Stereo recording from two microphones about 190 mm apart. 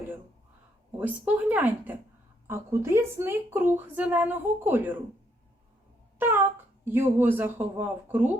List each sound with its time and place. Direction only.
0.9 s a woman's voice: 10° right (ahead or behind)
6.1 s a woman's voice: 10° right (ahead or behind)